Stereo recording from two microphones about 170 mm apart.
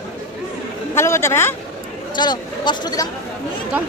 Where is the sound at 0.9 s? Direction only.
15° left (ahead or behind).